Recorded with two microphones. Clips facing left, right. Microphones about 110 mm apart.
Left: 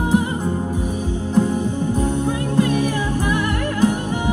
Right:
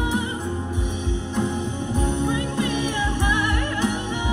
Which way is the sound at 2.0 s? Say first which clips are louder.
Left 3 dB; 40° left (ahead or behind).